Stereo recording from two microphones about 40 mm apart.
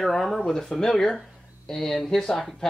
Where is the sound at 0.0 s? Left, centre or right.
Centre.